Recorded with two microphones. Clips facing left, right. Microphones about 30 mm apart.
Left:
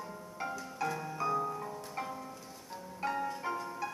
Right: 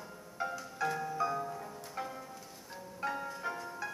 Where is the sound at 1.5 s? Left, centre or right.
Centre.